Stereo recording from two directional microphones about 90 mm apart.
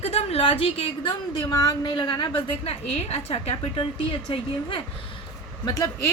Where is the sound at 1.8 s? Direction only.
70° left (ahead or behind).